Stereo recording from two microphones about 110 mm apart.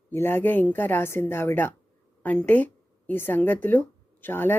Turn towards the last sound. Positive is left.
turn(degrees=20)  # may be behind; listen again after turning